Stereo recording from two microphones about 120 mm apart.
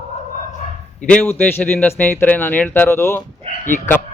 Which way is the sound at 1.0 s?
10° left (ahead or behind).